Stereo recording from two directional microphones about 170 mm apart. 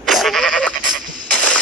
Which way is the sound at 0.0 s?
Centre (ahead or behind).